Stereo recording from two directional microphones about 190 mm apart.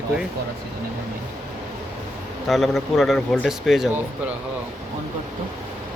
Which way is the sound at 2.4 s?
Centre (ahead or behind).